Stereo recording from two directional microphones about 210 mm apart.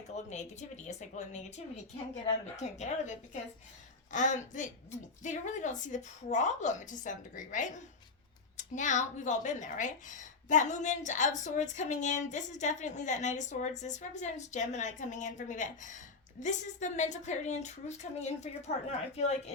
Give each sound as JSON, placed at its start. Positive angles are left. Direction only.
{"t": 0.3, "sound": "speech", "side_deg": 35}
{"t": 4.1, "sound": "speech", "side_deg": 35}